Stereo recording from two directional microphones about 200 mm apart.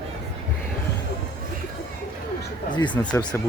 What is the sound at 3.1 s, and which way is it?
Speech, 10° left (ahead or behind).